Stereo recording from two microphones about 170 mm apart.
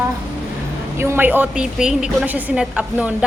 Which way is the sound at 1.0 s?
10° right (ahead or behind).